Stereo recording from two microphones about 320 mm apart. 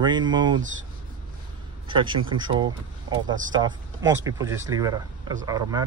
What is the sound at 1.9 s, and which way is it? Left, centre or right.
Speech, centre.